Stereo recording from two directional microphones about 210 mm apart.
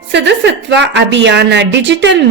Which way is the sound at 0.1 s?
55° right (ahead or behind).